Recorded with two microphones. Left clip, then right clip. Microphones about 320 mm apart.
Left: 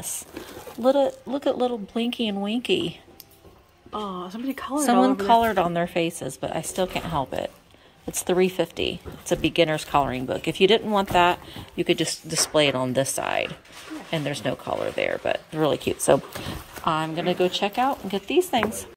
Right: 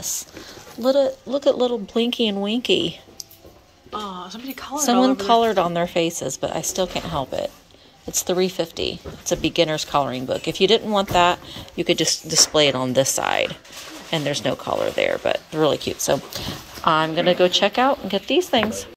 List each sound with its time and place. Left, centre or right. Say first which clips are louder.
0.8 s speech: right 2 dB; centre
3.9 s speech: right 1 dB; left
5.1 s speech: right 2 dB; centre